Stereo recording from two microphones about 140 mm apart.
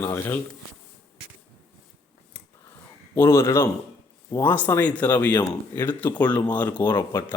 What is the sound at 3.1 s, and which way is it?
A man's voice, 15° left (ahead or behind).